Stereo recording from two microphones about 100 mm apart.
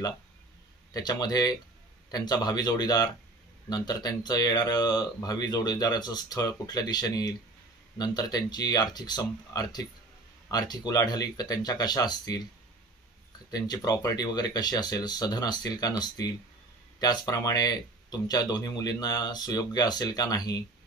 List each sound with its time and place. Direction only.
0.9 s speech: 40° left (ahead or behind)
13.5 s speech: 40° left (ahead or behind)
17.0 s speech: 40° left (ahead or behind)